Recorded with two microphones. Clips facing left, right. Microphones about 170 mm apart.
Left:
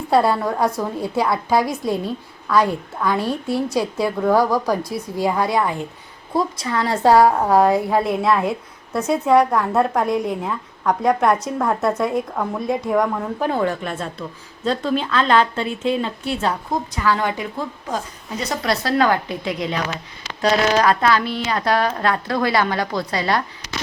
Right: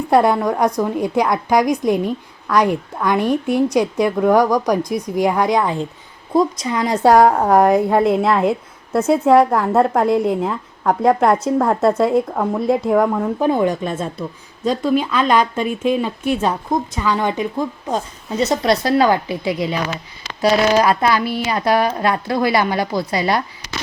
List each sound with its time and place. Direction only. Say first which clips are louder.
0.1 s a woman's voice: right 2 dB; 15° right (ahead or behind)